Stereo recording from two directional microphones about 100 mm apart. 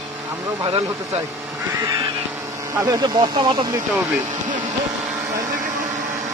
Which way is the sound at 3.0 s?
45° right (ahead or behind).